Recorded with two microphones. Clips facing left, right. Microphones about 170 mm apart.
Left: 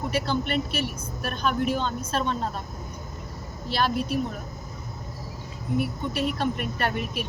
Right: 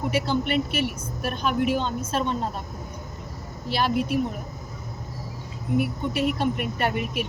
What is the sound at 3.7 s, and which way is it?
Speech, 15° right (ahead or behind).